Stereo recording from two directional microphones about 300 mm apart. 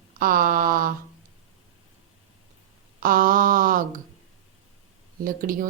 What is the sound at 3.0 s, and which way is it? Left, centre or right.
Speech, right.